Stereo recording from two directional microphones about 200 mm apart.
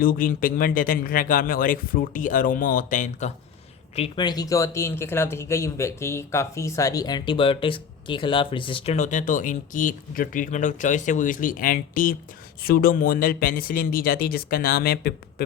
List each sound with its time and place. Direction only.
0.0 s speech: 45° left (ahead or behind)
3.9 s speech: 25° left (ahead or behind); by 15.4 s 50° left (ahead or behind)